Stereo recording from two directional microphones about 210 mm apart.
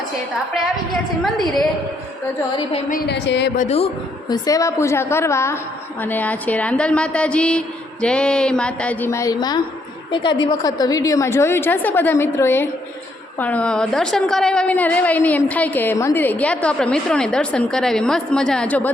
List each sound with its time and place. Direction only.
1.2 s a woman's voice: centre (ahead or behind)
2.9 s a woman's voice: 55° left (ahead or behind)
3.6 s speech: 30° left (ahead or behind)
4.3 s a woman's voice: 15° left (ahead or behind)